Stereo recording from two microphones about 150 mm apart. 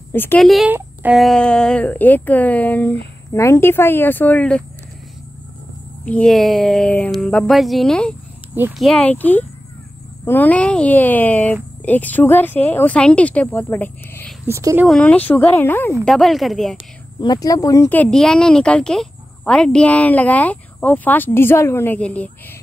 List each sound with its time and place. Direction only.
0.1 s speech: 15° left (ahead or behind)
0.4 s speech: centre (ahead or behind)
0.7 s speech: 10° right (ahead or behind)
1.2 s speech: 5° left (ahead or behind)
6.0 s speech: 5° left (ahead or behind)
14.4 s speech: 20° right (ahead or behind)
14.9 s speech: 10° left (ahead or behind)
16.1 s speech: centre (ahead or behind)
17.2 s speech: 25° left (ahead or behind); by 22.3 s 10° left (ahead or behind)